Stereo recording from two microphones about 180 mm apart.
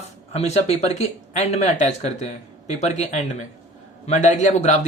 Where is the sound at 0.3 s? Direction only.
35° left (ahead or behind).